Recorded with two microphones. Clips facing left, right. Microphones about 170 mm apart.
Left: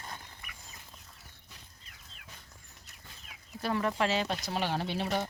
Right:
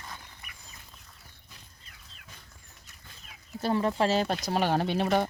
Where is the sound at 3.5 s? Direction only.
30° right (ahead or behind); by 5.3 s 55° right (ahead or behind).